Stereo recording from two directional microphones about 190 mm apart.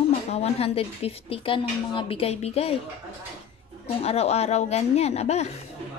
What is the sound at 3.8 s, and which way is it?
Speech, 35° left (ahead or behind).